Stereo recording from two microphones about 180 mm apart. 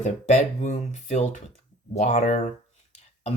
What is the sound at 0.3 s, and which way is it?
Speech, 40° left (ahead or behind).